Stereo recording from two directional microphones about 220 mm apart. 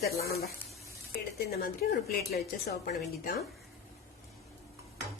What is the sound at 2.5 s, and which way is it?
Speech, 40° left (ahead or behind).